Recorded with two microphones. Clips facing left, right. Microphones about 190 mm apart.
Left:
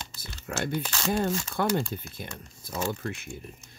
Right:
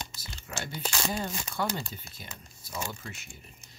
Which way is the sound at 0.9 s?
10° right (ahead or behind).